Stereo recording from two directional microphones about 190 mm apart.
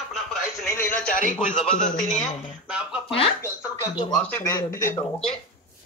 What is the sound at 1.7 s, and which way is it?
Speech, 45° left (ahead or behind).